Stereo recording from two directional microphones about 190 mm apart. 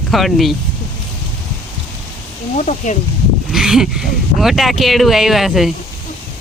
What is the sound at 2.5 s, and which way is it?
Speech, 40° left (ahead or behind).